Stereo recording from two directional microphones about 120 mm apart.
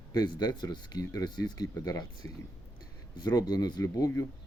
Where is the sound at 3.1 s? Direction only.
35° left (ahead or behind).